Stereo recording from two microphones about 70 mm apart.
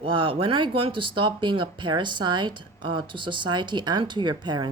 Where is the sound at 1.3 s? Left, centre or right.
Right.